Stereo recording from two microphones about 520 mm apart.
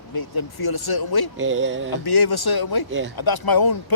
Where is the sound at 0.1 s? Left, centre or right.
Left.